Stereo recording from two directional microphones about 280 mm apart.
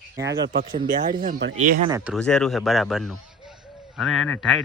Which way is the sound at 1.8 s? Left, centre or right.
Centre.